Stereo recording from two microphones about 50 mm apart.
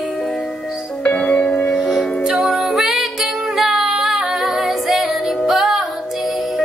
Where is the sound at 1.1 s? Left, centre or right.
Left.